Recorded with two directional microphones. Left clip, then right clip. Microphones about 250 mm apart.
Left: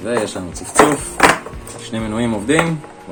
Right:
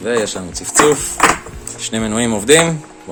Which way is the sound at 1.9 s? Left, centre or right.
Right.